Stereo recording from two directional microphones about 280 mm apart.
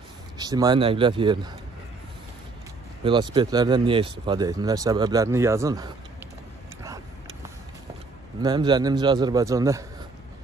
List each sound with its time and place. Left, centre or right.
0.4 s speech: centre
3.0 s speech: centre
8.4 s speech: centre